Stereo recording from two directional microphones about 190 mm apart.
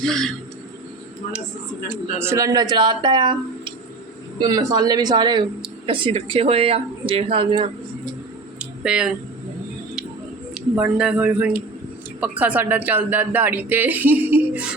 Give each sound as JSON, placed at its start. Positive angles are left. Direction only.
{"t": 0.0, "sound": "speech", "side_deg": 5}
{"t": 1.9, "sound": "speech", "side_deg": -10}
{"t": 8.8, "sound": "speech", "side_deg": -5}
{"t": 10.5, "sound": "speech", "side_deg": -5}